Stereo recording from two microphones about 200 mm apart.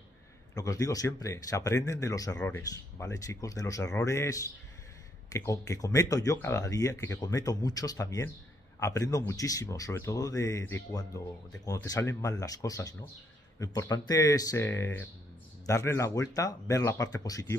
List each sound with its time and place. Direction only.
0.6 s speech: 15° left (ahead or behind)